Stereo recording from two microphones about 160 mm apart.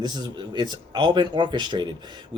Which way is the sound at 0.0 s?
25° right (ahead or behind).